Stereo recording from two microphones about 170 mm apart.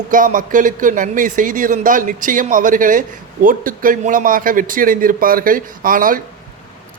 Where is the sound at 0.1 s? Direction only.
50° right (ahead or behind).